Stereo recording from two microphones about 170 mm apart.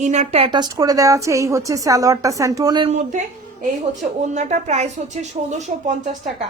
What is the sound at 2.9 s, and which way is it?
A woman's voice, 45° right (ahead or behind).